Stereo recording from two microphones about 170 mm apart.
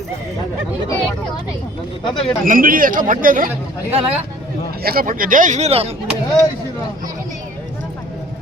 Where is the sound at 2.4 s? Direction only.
55° right (ahead or behind).